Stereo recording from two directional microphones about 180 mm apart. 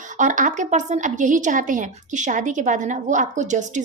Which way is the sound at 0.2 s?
45° right (ahead or behind).